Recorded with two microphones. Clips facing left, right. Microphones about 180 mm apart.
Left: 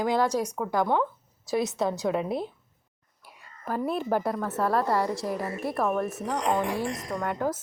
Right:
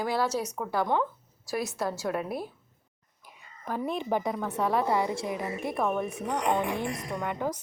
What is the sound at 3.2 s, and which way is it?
Whispering, 5° left (ahead or behind).